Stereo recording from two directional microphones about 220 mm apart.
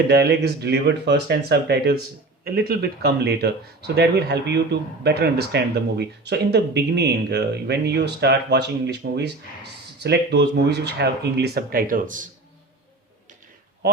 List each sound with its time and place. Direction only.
0.1 s speech: 45° right (ahead or behind)